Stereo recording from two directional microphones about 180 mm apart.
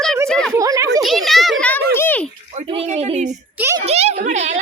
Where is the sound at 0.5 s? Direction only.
15° right (ahead or behind).